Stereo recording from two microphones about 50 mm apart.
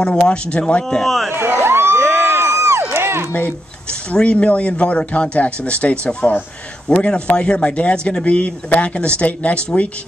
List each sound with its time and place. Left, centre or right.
0.3 s speech: left
0.8 s a man's voice: centre
1.3 s crowd: right
4.1 s speech: left